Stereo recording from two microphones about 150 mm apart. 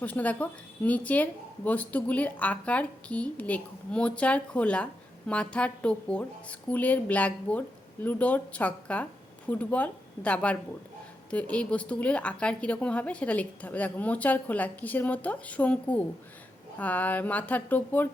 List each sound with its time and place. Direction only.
0.0 s speech: 10° left (ahead or behind)